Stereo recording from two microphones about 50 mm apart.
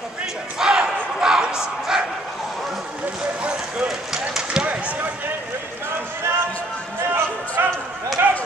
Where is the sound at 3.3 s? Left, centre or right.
Right.